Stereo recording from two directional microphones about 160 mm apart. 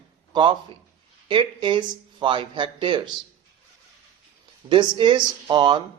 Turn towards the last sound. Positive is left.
turn(degrees=-30)  # may be behind; listen again after turning